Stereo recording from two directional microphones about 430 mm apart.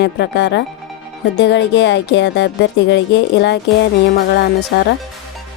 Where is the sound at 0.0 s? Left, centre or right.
Left.